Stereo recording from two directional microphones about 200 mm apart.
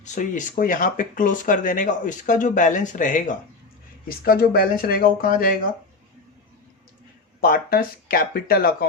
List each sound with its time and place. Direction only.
0.0 s speech: 40° left (ahead or behind)
7.4 s speech: 45° left (ahead or behind)